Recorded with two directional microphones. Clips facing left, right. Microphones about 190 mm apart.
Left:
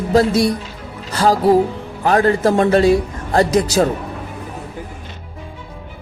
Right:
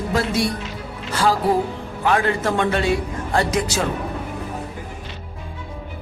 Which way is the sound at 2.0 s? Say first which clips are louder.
Left 6 dB; 40° left (ahead or behind).